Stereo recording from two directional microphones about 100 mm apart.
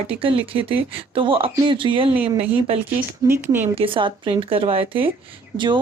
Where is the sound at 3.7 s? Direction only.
60° right (ahead or behind).